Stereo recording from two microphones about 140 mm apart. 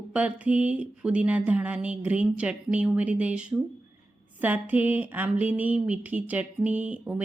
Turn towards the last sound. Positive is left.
turn(degrees=-10)  # may be behind; listen again after turning